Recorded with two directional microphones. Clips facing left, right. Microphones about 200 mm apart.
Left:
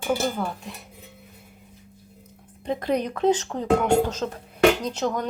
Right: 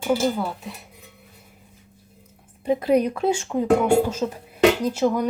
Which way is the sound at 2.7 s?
10° right (ahead or behind).